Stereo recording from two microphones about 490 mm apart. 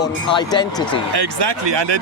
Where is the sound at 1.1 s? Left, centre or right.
Right.